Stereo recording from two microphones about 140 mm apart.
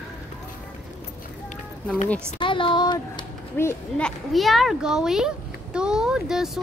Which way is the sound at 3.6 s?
15° left (ahead or behind).